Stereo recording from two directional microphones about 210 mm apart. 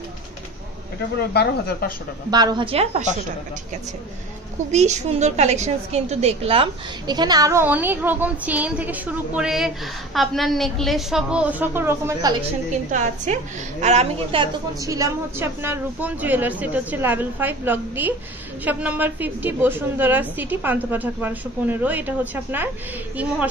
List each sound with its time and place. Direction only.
1.3 s speech: 50° left (ahead or behind)
2.3 s a woman's voice: 20° right (ahead or behind)
4.6 s a woman's voice: 35° right (ahead or behind); by 12.4 s 15° right (ahead or behind)
12.9 s a woman's voice: 35° right (ahead or behind); by 22.7 s 10° right (ahead or behind)